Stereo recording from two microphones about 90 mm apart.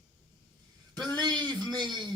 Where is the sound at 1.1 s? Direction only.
50° right (ahead or behind).